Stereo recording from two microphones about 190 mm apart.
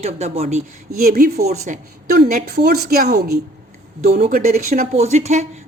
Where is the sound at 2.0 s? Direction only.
55° right (ahead or behind).